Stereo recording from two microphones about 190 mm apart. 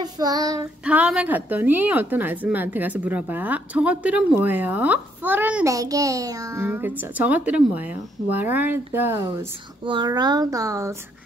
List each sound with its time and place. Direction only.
0.0 s child singing: 20° right (ahead or behind)
0.8 s a woman's voice: 5° right (ahead or behind)
9.8 s a child's voice: 25° right (ahead or behind)